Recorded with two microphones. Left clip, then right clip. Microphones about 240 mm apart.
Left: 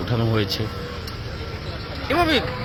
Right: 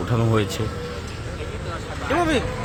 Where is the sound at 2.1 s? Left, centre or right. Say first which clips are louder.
Left 2 dB; centre.